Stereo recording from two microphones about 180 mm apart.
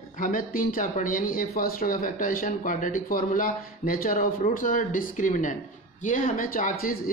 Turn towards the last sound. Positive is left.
turn(degrees=50)  # may be behind; listen again after turning